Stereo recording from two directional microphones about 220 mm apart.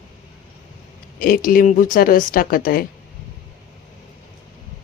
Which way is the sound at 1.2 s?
40° left (ahead or behind).